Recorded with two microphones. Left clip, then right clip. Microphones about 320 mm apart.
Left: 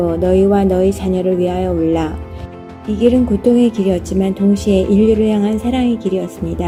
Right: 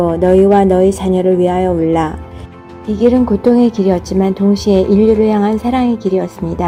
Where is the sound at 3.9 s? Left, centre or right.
Right.